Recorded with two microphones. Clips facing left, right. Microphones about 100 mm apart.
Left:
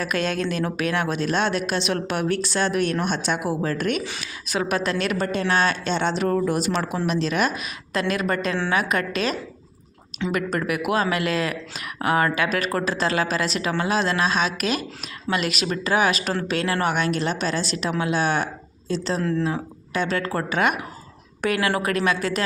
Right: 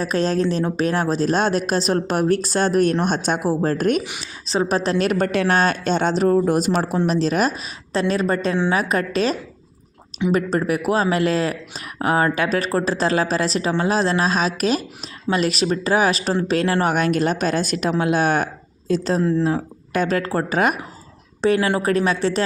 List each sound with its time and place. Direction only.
0.0 s speech: 30° right (ahead or behind)
4.2 s a woman's voice: 30° right (ahead or behind)
10.3 s a woman's voice: 30° right (ahead or behind)